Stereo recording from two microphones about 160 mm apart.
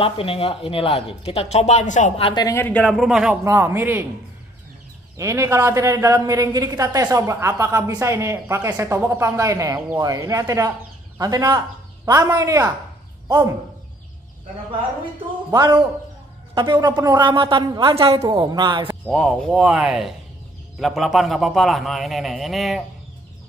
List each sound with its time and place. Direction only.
0.0 s speech: 35° left (ahead or behind)
2.4 s a man's voice: 15° left (ahead or behind); by 3.3 s 5° right (ahead or behind)
3.4 s speech: 15° right (ahead or behind)
5.1 s a woman's voice: 20° right (ahead or behind)
15.5 s a woman's voice: 25° right (ahead or behind)
18.2 s a woman's voice: 25° right (ahead or behind)
19.0 s a man's voice: centre (ahead or behind)